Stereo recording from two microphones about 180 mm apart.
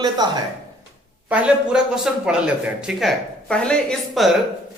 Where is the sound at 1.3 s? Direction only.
5° right (ahead or behind).